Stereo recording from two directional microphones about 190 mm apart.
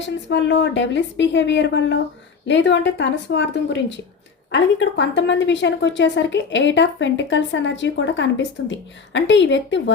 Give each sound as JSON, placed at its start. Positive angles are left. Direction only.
{"t": 0.0, "sound": "a woman's voice", "side_deg": 70}